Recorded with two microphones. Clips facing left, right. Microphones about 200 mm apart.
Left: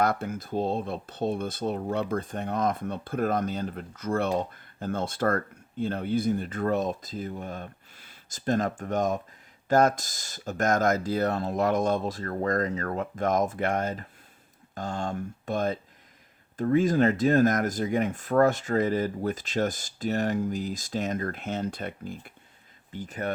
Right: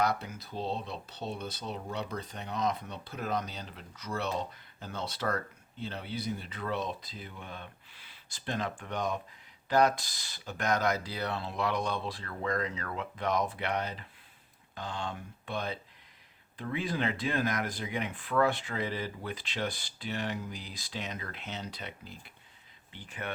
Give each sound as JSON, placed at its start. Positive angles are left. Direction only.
{"t": 0.0, "sound": "speech", "side_deg": 50}